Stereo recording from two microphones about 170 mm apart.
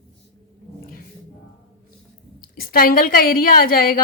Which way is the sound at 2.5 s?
60° left (ahead or behind).